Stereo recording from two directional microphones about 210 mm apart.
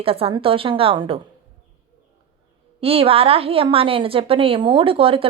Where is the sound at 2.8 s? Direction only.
25° right (ahead or behind).